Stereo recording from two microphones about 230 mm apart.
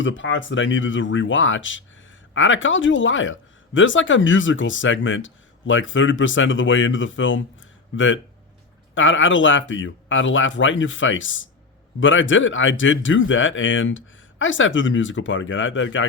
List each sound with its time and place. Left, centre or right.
0.0 s speech: left